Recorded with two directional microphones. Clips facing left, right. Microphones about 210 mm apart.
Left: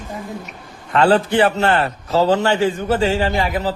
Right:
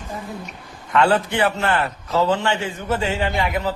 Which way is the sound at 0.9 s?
30° left (ahead or behind).